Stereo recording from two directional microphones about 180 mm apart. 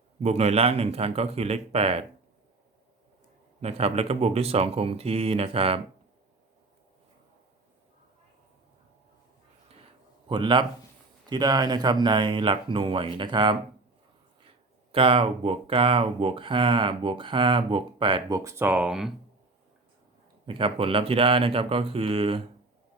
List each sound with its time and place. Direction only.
0.2 s speech: 35° right (ahead or behind)
3.6 s speech: 35° right (ahead or behind)
10.2 s speech: 25° right (ahead or behind)
14.9 s speech: 30° right (ahead or behind); by 19.1 s 5° right (ahead or behind)
20.5 s speech: 30° right (ahead or behind)